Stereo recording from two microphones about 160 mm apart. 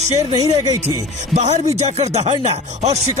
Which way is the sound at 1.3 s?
45° right (ahead or behind).